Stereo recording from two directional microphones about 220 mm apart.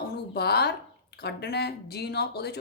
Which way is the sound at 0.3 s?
45° left (ahead or behind).